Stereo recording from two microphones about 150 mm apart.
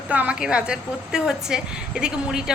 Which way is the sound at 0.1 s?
10° right (ahead or behind).